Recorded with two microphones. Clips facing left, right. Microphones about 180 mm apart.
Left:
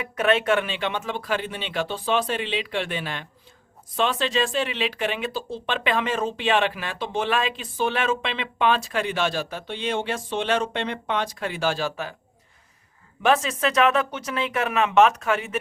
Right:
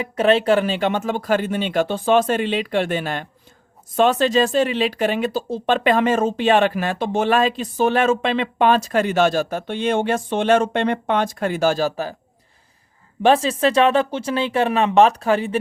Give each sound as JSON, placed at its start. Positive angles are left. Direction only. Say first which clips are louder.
{"t": 0.0, "sound": "speech", "louder": "right 5 dB", "side_deg": -30}
{"t": 13.2, "sound": "speech", "louder": "right 5 dB", "side_deg": -30}